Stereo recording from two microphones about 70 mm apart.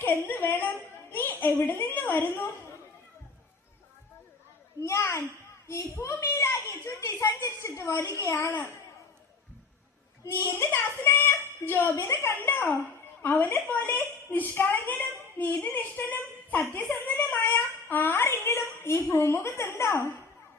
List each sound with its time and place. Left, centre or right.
0.3 s a woman's voice: left
4.8 s a child's voice: left
8.4 s a woman's voice: left
10.7 s a woman's voice: left
12.4 s a woman's voice: left